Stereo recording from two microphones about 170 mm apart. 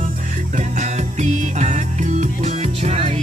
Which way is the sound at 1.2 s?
45° right (ahead or behind).